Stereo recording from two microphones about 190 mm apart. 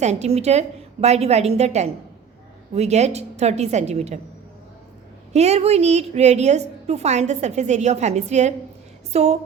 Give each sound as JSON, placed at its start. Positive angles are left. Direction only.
{"t": 0.0, "sound": "a woman's voice", "side_deg": -35}
{"t": 5.3, "sound": "a woman's voice", "side_deg": -35}